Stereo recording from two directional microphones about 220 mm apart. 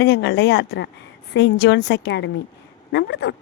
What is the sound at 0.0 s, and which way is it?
Speech, 50° left (ahead or behind).